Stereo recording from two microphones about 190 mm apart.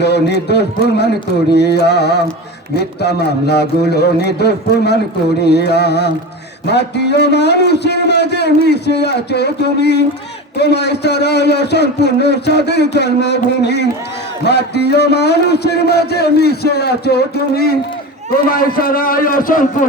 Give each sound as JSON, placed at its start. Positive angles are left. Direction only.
{"t": 0.0, "sound": "a man's voice", "side_deg": 60}